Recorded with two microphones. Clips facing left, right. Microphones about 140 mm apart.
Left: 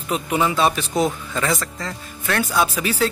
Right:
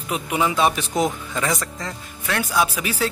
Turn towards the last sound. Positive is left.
turn(degrees=-10)  # may be behind; listen again after turning